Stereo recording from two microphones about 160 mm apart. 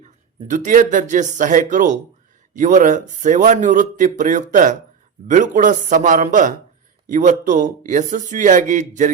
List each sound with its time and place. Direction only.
0.4 s speech: 50° right (ahead or behind)